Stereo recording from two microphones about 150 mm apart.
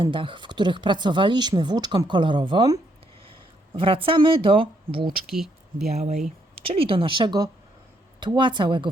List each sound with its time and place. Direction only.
0.0 s speech: 35° right (ahead or behind)
5.2 s speech: centre (ahead or behind)
6.0 s speech: 45° right (ahead or behind)